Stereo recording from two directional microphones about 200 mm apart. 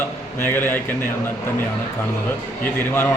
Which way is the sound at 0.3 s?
10° left (ahead or behind).